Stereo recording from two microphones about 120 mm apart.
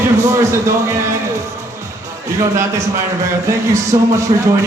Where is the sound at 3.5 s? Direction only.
25° right (ahead or behind).